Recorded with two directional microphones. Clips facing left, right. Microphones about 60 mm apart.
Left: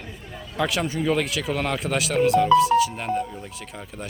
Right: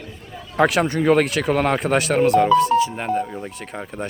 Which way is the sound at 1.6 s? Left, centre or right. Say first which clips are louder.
Right 6 dB; right.